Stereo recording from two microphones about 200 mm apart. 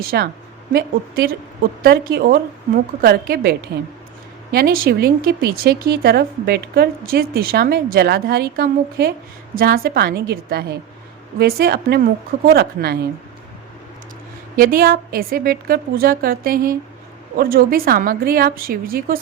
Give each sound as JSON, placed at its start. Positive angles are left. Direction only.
{"t": 0.1, "sound": "speech", "side_deg": -55}
{"t": 4.5, "sound": "speech", "side_deg": -45}
{"t": 14.5, "sound": "speech", "side_deg": -45}